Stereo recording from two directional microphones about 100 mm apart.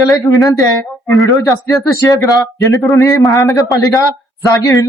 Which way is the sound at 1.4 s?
30° left (ahead or behind).